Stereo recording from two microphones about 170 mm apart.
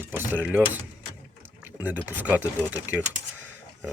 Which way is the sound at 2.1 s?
10° right (ahead or behind).